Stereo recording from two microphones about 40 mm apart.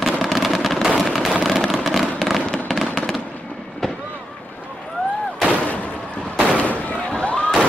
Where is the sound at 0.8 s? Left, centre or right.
Centre.